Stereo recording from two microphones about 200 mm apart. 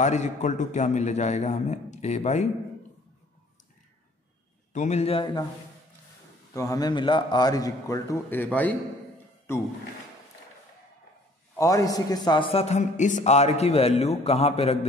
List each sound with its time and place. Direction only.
0.0 s a man's voice: 35° left (ahead or behind)
4.7 s a man's voice: 35° left (ahead or behind)
6.5 s a man's voice: 15° left (ahead or behind)
11.5 s a man's voice: 15° left (ahead or behind)